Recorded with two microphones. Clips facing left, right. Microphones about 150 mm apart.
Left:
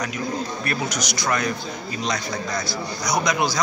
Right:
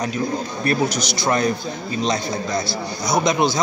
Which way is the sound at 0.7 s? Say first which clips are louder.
Right 10 dB; 30° right (ahead or behind).